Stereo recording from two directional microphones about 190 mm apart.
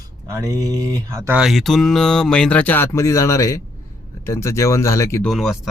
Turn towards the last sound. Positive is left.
turn(degrees=0)  # may be behind; listen again after turning